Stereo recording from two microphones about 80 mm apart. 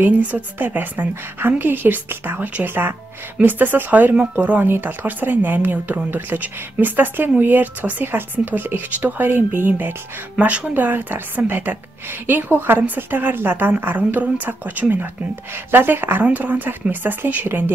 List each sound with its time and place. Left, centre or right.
0.0 s speech: right